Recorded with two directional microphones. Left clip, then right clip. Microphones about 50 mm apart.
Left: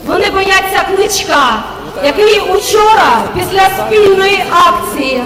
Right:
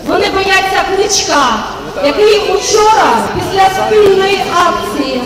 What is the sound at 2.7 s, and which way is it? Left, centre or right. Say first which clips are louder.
Speech: left 1 dB; left.